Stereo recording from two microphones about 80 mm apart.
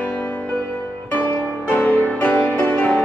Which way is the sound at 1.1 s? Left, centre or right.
Left.